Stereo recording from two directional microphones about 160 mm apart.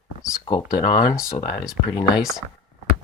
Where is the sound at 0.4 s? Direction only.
25° left (ahead or behind).